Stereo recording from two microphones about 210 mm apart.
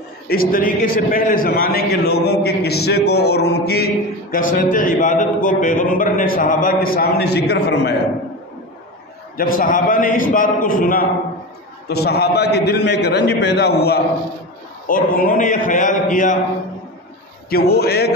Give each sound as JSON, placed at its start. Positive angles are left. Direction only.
{"t": 0.3, "sound": "a man's voice", "side_deg": 45}
{"t": 9.4, "sound": "a man's voice", "side_deg": 40}
{"t": 17.5, "sound": "a man's voice", "side_deg": 50}